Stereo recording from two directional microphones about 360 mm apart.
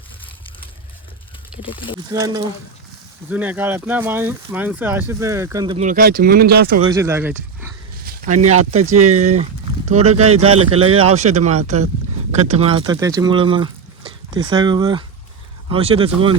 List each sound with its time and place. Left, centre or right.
1.6 s speech: centre
2.1 s speech: centre; by 6.7 s right
6.8 s speech: centre
8.0 s a sound: right
8.8 s speech: centre
10.3 s speech: right
10.7 s speech: centre